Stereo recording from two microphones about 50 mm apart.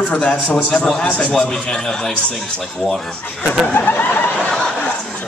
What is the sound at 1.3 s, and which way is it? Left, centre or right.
A man's voice, centre.